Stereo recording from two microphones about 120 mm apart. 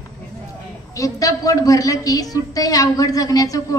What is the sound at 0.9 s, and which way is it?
A man's voice, 30° left (ahead or behind).